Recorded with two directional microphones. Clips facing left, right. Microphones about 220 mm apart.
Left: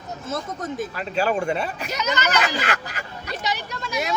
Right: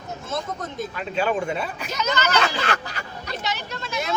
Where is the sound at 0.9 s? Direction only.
Centre (ahead or behind).